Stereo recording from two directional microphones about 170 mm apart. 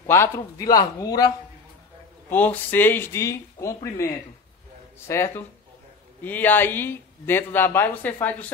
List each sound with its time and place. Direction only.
0.0 s speech: 15° left (ahead or behind)
2.2 s speech: 10° left (ahead or behind)